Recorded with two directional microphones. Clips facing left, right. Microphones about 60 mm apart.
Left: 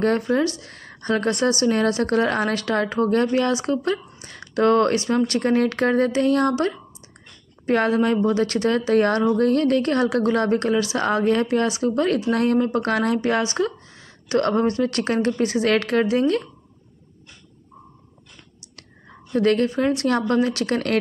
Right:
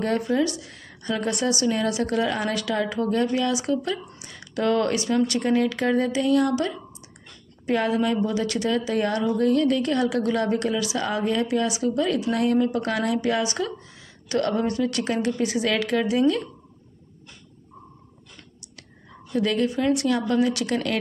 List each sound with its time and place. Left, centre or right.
0.0 s a woman's voice: left
19.3 s a woman's voice: left